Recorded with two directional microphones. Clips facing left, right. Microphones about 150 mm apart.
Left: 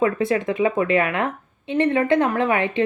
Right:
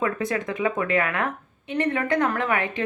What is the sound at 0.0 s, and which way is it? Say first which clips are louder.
A woman's voice: left 6 dB; 25° left (ahead or behind).